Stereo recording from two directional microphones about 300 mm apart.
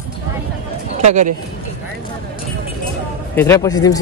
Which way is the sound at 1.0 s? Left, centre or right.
Right.